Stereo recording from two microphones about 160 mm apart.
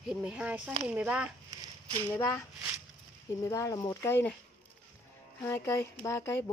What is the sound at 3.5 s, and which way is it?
Speech, 20° left (ahead or behind).